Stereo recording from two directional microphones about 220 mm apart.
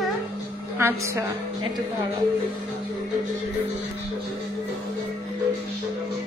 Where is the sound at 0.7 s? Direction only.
10° right (ahead or behind).